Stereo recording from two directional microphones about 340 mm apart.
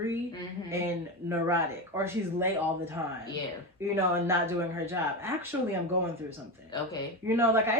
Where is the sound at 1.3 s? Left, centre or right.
Centre.